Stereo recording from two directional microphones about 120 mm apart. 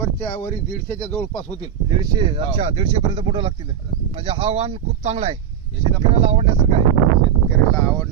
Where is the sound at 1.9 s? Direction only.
35° right (ahead or behind); by 5.4 s 60° right (ahead or behind).